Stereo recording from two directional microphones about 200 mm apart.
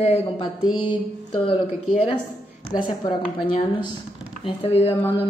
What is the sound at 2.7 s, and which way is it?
A woman's voice, 25° left (ahead or behind).